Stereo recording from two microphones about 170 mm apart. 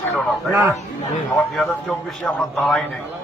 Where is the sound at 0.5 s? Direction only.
15° right (ahead or behind).